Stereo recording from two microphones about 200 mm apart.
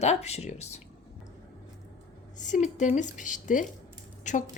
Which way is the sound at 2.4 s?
40° left (ahead or behind).